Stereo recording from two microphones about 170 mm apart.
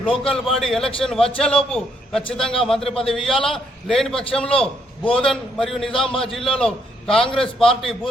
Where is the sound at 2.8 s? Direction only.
35° left (ahead or behind).